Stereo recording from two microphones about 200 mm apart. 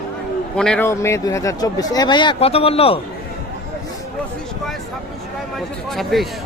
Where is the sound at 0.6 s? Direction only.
5° left (ahead or behind); by 3.0 s 30° left (ahead or behind).